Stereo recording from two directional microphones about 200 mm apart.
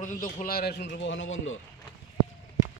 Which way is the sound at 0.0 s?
40° left (ahead or behind).